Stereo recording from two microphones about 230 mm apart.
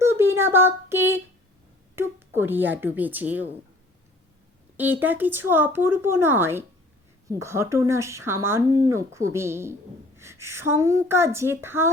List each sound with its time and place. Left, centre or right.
0.0 s a sound: centre
2.0 s speech: centre
4.8 s speech: centre